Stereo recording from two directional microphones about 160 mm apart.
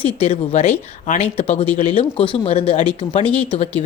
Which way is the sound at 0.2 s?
40° left (ahead or behind).